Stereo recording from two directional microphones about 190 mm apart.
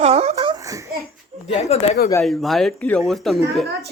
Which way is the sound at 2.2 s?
Centre (ahead or behind).